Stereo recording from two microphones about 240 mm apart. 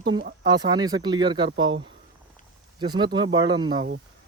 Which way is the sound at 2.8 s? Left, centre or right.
Centre.